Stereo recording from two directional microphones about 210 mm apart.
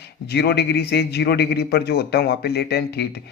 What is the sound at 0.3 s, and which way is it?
Speech, 50° left (ahead or behind).